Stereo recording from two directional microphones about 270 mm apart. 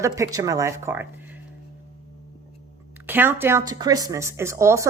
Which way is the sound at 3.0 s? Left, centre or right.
Centre.